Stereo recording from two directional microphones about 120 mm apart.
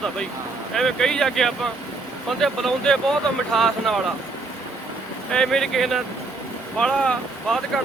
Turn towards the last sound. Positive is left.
turn(degrees=5)  # may be behind; listen again after turning